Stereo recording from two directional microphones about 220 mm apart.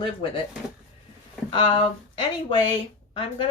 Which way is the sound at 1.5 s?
25° left (ahead or behind).